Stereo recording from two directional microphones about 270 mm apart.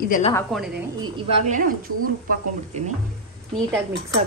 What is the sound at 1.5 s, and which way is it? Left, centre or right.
Speech, right.